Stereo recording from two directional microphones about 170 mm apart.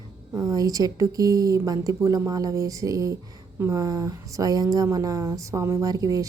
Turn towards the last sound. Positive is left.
turn(degrees=-20)  # may be behind; listen again after turning